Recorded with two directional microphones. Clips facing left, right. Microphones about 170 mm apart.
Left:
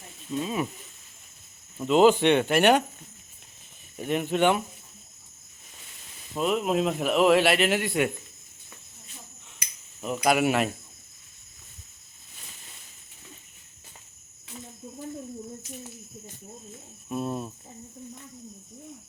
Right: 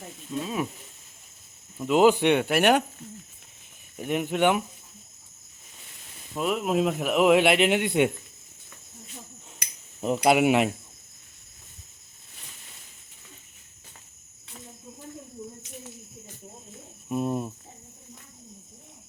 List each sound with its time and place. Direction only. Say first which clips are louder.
0.3 s speech: left 1 dB; centre (ahead or behind)
1.8 s a man's voice: left 1 dB; 10° right (ahead or behind)
3.9 s a man's voice: left 1 dB; 10° right (ahead or behind)
6.3 s a man's voice: even; 5° right (ahead or behind); by 8.1 s 20° right (ahead or behind)
10.2 s speech: right 3 dB; 20° right (ahead or behind)
17.1 s speech: right 3 dB; 15° right (ahead or behind)